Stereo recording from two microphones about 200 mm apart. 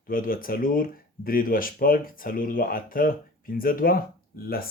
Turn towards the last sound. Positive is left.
turn(degrees=50)  # may be behind; listen again after turning